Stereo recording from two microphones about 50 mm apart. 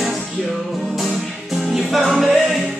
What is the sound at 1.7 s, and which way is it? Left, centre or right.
Music, centre.